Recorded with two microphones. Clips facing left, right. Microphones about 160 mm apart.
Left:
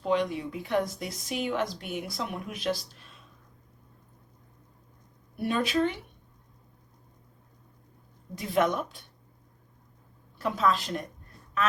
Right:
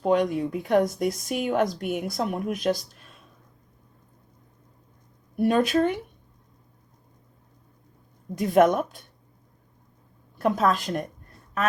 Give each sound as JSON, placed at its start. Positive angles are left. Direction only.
{"t": 0.0, "sound": "speech", "side_deg": -50}
{"t": 5.4, "sound": "speech", "side_deg": -45}
{"t": 8.4, "sound": "speech", "side_deg": -45}
{"t": 10.4, "sound": "speech", "side_deg": -50}